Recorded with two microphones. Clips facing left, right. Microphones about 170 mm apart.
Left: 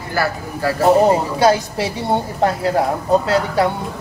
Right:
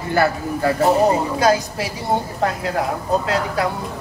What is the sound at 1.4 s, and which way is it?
Speech, 25° left (ahead or behind).